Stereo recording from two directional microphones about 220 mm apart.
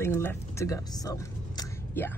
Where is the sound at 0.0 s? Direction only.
10° left (ahead or behind).